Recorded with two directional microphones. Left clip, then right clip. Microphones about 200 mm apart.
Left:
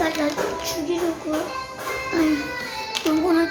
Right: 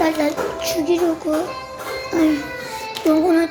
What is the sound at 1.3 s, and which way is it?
Speech, 20° right (ahead or behind).